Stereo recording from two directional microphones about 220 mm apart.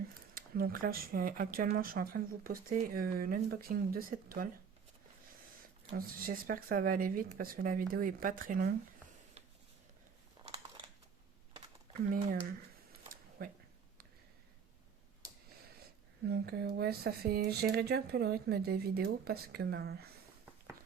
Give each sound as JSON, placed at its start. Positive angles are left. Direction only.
{"t": 0.3, "sound": "speech", "side_deg": -40}
{"t": 6.0, "sound": "speech", "side_deg": -40}
{"t": 10.4, "sound": "a sound", "side_deg": -30}
{"t": 13.4, "sound": "speech", "side_deg": -40}
{"t": 16.2, "sound": "speech", "side_deg": -45}